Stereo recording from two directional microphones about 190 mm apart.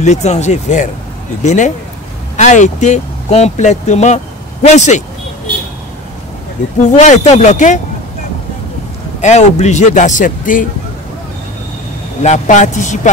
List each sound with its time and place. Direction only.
0.0 s speech: 35° left (ahead or behind)
6.8 s speech: 40° left (ahead or behind)
9.2 s speech: 35° left (ahead or behind)
12.2 s speech: 40° left (ahead or behind)